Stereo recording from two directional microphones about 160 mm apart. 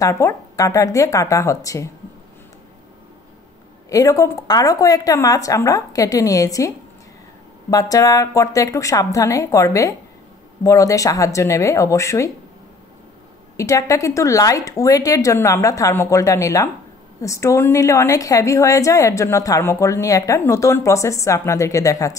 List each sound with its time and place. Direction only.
0.0 s a woman's voice: 20° left (ahead or behind)
3.9 s a woman's voice: 20° left (ahead or behind)
7.7 s a woman's voice: 20° left (ahead or behind)
13.6 s a woman's voice: 20° left (ahead or behind)